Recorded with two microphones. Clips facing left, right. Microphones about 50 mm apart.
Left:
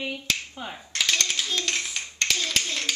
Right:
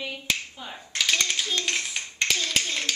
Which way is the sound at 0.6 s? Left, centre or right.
Left.